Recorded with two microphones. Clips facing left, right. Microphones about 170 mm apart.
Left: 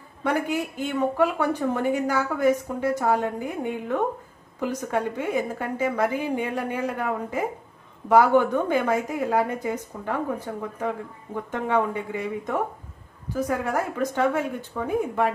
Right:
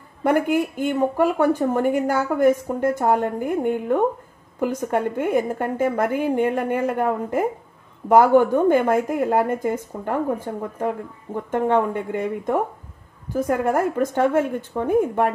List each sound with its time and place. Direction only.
0.2 s speech: 55° right (ahead or behind)